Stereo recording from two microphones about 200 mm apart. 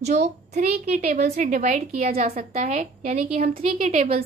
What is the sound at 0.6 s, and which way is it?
A woman's voice, 35° right (ahead or behind).